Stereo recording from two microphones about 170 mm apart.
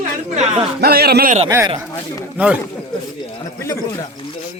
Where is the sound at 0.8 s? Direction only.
65° right (ahead or behind).